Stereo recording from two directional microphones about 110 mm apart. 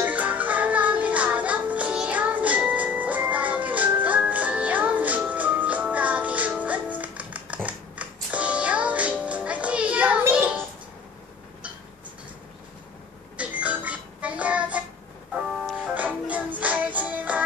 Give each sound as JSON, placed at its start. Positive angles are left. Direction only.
{"t": 0.0, "sound": "music", "side_deg": -15}
{"t": 13.4, "sound": "a sound", "side_deg": -15}
{"t": 15.3, "sound": "music", "side_deg": -15}